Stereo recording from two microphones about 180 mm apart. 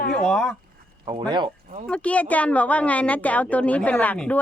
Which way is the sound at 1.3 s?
25° right (ahead or behind).